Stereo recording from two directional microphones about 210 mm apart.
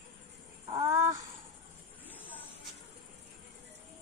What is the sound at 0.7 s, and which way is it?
Crow, 15° right (ahead or behind).